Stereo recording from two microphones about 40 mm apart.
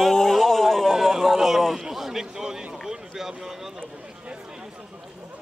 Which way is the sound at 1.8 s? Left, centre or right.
Centre.